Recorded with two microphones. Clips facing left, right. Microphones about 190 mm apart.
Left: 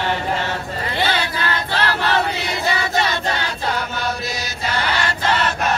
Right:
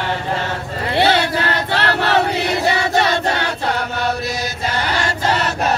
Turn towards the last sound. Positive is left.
turn(degrees=-40)  # may be behind; listen again after turning